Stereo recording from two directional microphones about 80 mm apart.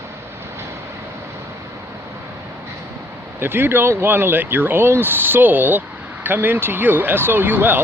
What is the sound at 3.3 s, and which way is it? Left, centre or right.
Speech, right.